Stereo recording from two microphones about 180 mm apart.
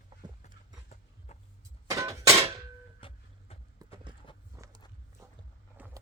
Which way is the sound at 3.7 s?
25° right (ahead or behind).